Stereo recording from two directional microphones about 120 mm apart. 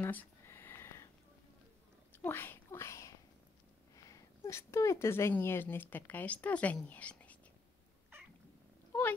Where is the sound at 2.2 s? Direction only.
20° left (ahead or behind).